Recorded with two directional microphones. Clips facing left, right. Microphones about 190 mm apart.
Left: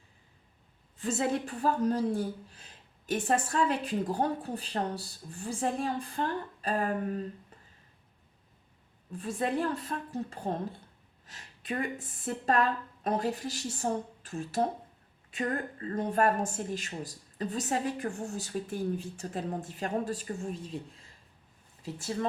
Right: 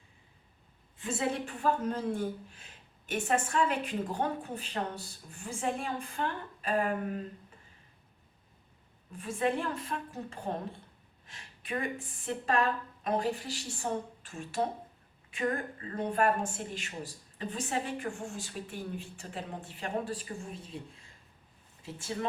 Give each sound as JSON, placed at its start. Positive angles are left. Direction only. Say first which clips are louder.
{"t": 0.9, "sound": "a woman's voice", "louder": "left 3 dB", "side_deg": 40}
{"t": 9.1, "sound": "a woman's voice", "louder": "even", "side_deg": 35}
{"t": 21.9, "sound": "a woman's voice", "louder": "left 3 dB", "side_deg": 40}